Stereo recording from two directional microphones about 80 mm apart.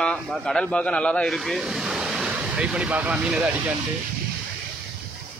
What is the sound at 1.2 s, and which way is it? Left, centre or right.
Speech, centre.